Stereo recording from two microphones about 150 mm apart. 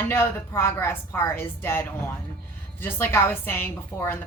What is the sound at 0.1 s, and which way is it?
A woman's voice, 15° left (ahead or behind).